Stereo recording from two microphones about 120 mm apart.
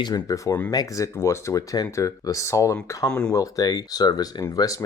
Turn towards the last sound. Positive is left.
turn(degrees=35)  # may be behind; listen again after turning